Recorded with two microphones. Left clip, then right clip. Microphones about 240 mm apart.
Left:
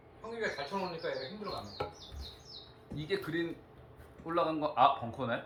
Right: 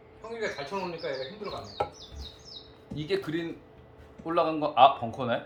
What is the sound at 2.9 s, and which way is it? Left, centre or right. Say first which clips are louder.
Speech: right 4 dB; right.